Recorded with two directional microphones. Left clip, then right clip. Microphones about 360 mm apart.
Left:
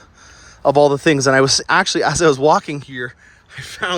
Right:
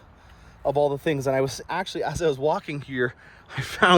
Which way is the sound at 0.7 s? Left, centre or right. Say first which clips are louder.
Left 10 dB; left.